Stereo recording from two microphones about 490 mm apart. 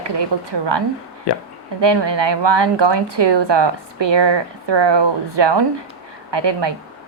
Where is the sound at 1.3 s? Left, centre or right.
Left.